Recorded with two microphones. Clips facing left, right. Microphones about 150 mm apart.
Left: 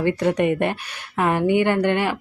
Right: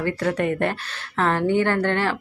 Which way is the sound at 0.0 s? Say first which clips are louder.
Left 3 dB; 20° left (ahead or behind).